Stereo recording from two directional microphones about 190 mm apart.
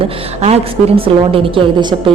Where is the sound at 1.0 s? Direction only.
30° right (ahead or behind).